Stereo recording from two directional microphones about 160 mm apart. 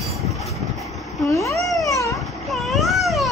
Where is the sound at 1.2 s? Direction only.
20° left (ahead or behind).